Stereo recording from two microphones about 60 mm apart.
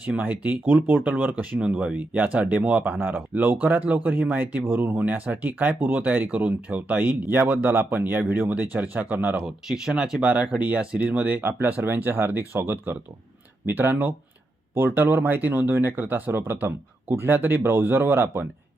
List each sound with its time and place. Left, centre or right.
0.2 s speech: right
9.6 s speech: centre; by 18.4 s right